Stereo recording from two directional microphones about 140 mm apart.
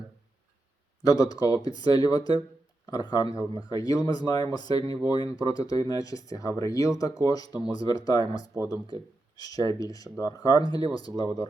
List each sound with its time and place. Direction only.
1.0 s speech: 25° left (ahead or behind)